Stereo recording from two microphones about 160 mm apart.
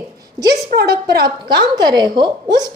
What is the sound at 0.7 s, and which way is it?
Speech, 90° right.